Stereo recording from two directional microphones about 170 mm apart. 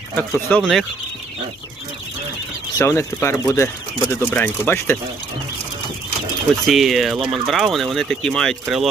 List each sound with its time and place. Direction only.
0.2 s speech: 10° left (ahead or behind)
2.7 s speech: 15° left (ahead or behind)
6.7 s speech: centre (ahead or behind)